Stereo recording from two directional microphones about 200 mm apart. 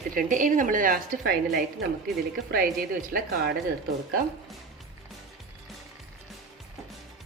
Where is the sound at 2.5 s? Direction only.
45° right (ahead or behind).